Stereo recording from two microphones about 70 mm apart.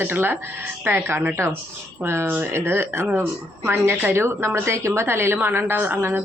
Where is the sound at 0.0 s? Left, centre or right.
Right.